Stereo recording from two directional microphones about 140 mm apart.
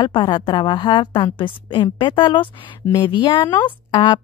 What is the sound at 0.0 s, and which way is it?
A woman's voice, 35° left (ahead or behind).